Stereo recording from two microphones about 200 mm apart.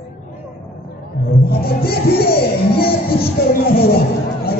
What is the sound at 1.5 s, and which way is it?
Speech, 50° left (ahead or behind).